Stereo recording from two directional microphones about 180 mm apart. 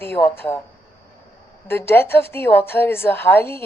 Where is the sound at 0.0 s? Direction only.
10° left (ahead or behind).